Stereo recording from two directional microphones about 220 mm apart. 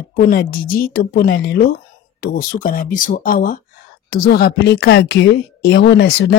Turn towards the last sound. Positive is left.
turn(degrees=50)  # may be behind; listen again after turning